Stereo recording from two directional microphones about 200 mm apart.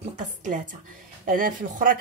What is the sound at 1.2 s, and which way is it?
Speech, 45° right (ahead or behind).